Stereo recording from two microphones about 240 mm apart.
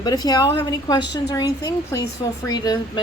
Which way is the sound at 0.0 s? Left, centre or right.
Centre.